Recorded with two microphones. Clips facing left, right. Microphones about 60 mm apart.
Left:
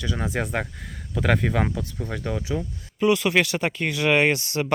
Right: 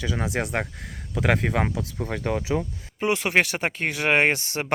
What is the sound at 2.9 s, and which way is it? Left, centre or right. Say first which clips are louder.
Speech: left 2 dB; right.